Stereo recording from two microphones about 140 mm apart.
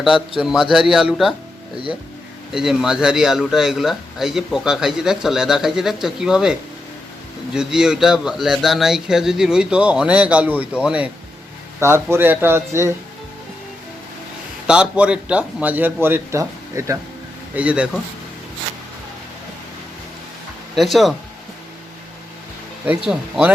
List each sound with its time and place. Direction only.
0.0 s a man's voice: 5° right (ahead or behind)
2.5 s a man's voice: 5° right (ahead or behind)
14.7 s a man's voice: 5° right (ahead or behind)
17.5 s a man's voice: 10° right (ahead or behind)
20.7 s a man's voice: centre (ahead or behind)
22.9 s a man's voice: 10° right (ahead or behind)